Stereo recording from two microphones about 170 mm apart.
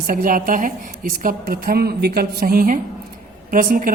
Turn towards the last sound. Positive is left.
turn(degrees=-55)  # may be behind; listen again after turning